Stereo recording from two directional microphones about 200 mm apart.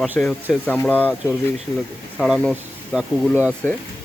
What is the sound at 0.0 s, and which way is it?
Speech, centre (ahead or behind).